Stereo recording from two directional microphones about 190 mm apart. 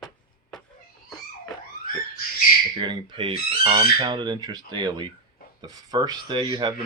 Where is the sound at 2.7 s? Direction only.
25° right (ahead or behind).